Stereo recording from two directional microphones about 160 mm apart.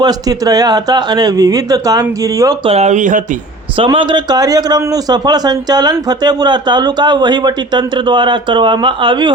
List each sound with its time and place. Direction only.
0.0 s a man's voice: 25° right (ahead or behind)
2.6 s speech: 45° right (ahead or behind)
3.8 s a man's voice: 30° right (ahead or behind)